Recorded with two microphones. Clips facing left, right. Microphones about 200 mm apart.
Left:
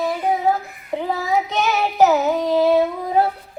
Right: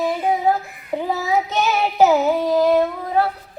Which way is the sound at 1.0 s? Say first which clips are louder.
Even; 5° right (ahead or behind).